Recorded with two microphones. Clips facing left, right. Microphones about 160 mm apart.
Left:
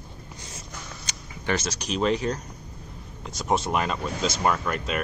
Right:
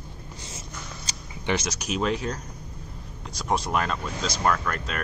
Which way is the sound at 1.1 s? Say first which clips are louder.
Right 1 dB; 35° right (ahead or behind).